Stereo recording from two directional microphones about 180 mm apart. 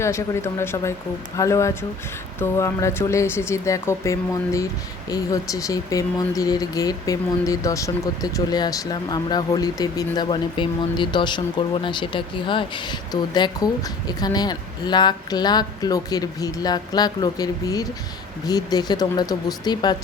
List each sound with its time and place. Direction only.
0.0 s speech: 15° left (ahead or behind)